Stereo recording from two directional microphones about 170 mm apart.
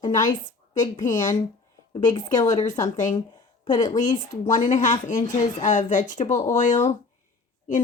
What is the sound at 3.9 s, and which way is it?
Speech, 45° left (ahead or behind).